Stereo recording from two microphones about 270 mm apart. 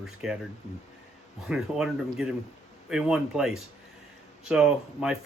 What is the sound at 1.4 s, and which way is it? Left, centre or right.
Speech, centre.